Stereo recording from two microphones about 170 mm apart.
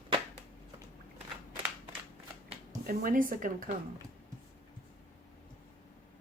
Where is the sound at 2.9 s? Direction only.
55° right (ahead or behind).